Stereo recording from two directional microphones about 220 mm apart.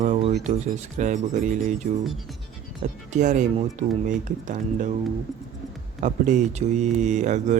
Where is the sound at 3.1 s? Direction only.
35° right (ahead or behind).